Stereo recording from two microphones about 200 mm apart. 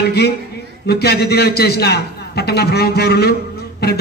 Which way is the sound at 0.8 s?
50° left (ahead or behind).